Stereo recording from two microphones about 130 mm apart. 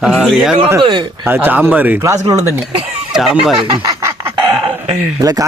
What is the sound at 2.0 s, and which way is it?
Speech, 25° right (ahead or behind).